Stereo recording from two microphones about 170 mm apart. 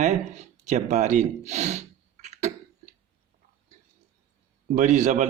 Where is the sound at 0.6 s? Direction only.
45° right (ahead or behind).